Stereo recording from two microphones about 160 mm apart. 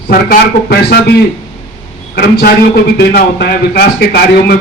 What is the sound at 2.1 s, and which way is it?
A man's voice, 75° left (ahead or behind).